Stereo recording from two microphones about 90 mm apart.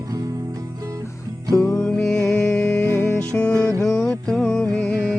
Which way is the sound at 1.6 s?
10° left (ahead or behind).